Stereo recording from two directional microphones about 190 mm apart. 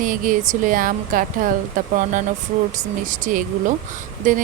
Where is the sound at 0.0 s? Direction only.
45° right (ahead or behind).